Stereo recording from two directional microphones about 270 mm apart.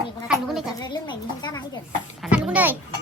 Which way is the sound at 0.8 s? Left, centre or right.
Centre.